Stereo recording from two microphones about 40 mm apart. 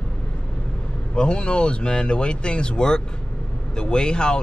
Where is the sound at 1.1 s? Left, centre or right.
Left.